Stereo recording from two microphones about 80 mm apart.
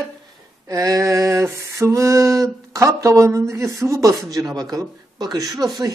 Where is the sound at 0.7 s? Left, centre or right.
Right.